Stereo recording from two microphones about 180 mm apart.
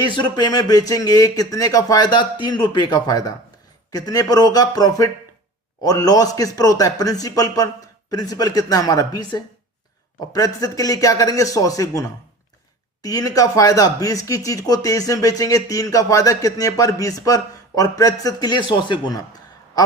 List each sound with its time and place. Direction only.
0.0 s speech: 25° left (ahead or behind)